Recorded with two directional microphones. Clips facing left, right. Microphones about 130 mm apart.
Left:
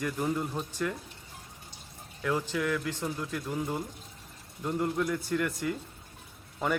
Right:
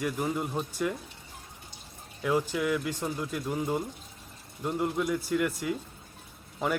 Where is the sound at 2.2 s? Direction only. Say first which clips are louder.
Right 2 dB; 15° right (ahead or behind).